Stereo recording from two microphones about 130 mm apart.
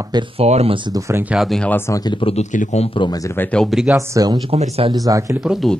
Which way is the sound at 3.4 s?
10° left (ahead or behind).